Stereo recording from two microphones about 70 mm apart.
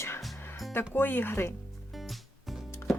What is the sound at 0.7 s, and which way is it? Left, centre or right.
Speech, left.